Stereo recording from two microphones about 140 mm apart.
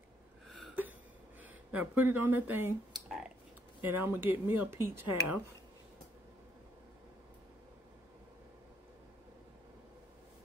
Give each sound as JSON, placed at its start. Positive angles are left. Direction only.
{"t": 1.4, "sound": "speech", "side_deg": -10}
{"t": 2.9, "sound": "a sound", "side_deg": -5}
{"t": 3.8, "sound": "speech", "side_deg": -15}